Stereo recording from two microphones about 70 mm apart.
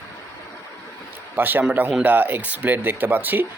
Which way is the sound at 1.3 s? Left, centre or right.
Right.